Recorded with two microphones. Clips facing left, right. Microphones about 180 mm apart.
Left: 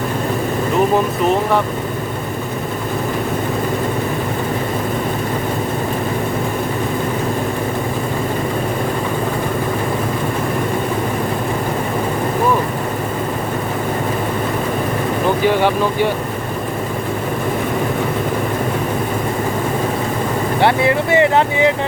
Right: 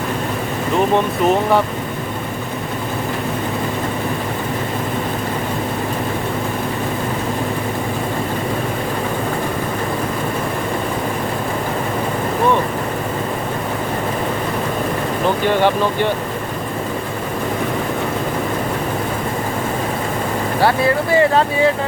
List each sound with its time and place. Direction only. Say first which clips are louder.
0.9 s speech: even; centre (ahead or behind)
15.4 s speech: even; 10° left (ahead or behind)
20.6 s speech: left 1 dB; 20° left (ahead or behind)